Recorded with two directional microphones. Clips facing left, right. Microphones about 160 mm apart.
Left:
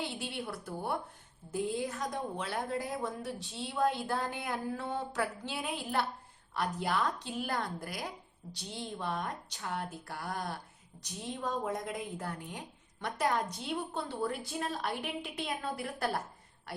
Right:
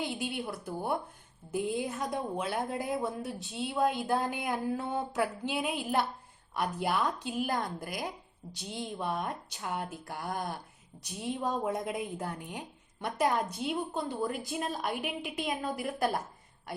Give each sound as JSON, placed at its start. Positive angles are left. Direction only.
{"t": 0.0, "sound": "a woman's voice", "side_deg": -15}